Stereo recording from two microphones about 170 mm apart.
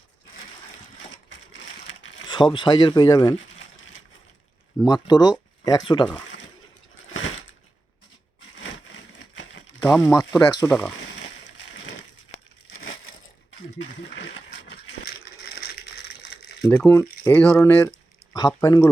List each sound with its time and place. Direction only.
2.2 s speech: 25° left (ahead or behind)
4.8 s speech: 25° left (ahead or behind)
9.1 s a sound: 90° left
10.0 s speech: 20° left (ahead or behind)
14.2 s crushing: 90° left; by 15.7 s 65° left (ahead or behind)
16.3 s a sound: 70° left (ahead or behind)
16.6 s speech: 15° left (ahead or behind)